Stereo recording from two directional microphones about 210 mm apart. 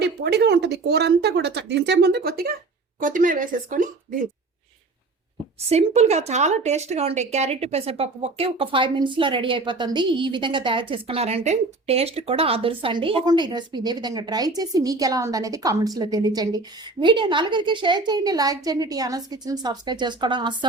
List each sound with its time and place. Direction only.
0.0 s a woman's voice: 50° right (ahead or behind)
5.6 s speech: 30° right (ahead or behind)